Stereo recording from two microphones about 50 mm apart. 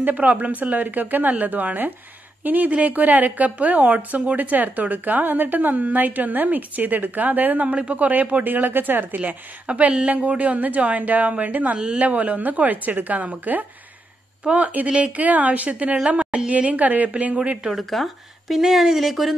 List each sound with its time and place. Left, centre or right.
0.0 s a woman's voice: right
9.7 s a woman's voice: right
16.1 s a sound: right
16.3 s a woman's voice: right
17.7 s speech: centre